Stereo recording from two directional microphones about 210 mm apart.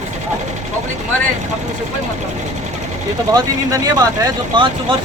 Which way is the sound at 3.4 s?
20° right (ahead or behind).